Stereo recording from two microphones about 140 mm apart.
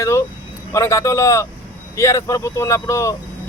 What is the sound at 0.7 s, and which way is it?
Speech, 20° left (ahead or behind).